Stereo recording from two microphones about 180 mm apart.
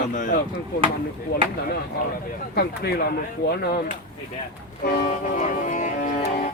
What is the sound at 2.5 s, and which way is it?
Speech, 60° left (ahead or behind).